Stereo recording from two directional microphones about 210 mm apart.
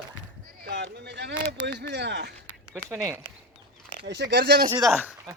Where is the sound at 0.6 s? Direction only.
55° right (ahead or behind).